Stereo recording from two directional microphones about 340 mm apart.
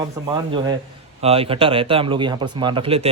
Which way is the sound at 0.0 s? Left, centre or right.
Centre.